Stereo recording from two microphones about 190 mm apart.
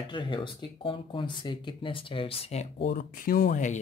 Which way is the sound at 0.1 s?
25° left (ahead or behind).